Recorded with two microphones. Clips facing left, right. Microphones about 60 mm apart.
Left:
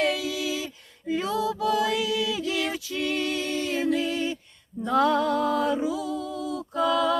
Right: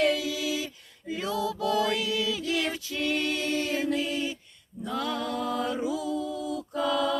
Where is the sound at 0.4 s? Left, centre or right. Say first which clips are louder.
Left 1 dB; left.